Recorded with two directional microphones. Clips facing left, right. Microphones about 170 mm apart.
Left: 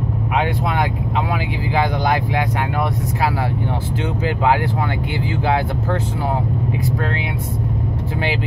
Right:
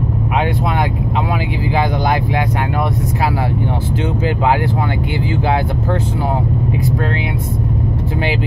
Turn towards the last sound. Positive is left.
turn(degrees=-20)  # may be behind; listen again after turning